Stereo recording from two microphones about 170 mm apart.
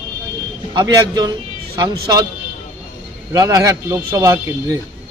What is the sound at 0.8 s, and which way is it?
A man's voice, 25° right (ahead or behind).